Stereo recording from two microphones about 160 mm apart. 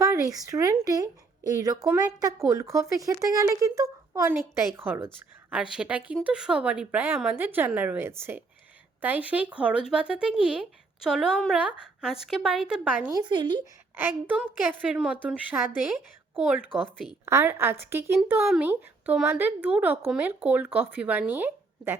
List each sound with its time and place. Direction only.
0.0 s speech: 20° right (ahead or behind); by 13.1 s 5° right (ahead or behind)
13.1 s speech: 25° right (ahead or behind)
13.9 s speech: 10° right (ahead or behind)